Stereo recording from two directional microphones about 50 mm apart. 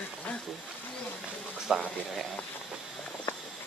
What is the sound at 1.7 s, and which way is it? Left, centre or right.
Speech, centre.